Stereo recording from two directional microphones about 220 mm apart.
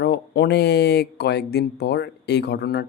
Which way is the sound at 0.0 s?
50° left (ahead or behind).